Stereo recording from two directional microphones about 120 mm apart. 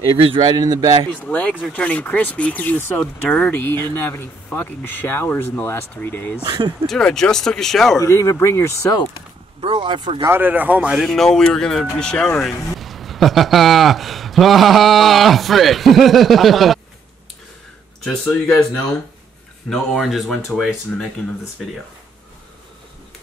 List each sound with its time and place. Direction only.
0.4 s a man's voice: 35° right (ahead or behind)
1.2 s speech: 10° left (ahead or behind)
6.9 s speech: 5° left (ahead or behind)
8.0 s speech: 25° left (ahead or behind)
9.6 s speech: 45° right (ahead or behind)
10.2 s speech: 15° right (ahead or behind); by 16.8 s centre (ahead or behind)
18.2 s speech: 15° left (ahead or behind)
19.7 s speech: centre (ahead or behind)